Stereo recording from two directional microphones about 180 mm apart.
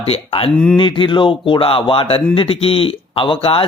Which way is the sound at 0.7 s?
25° left (ahead or behind).